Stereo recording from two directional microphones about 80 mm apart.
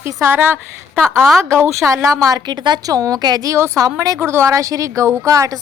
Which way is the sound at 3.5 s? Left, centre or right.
Right.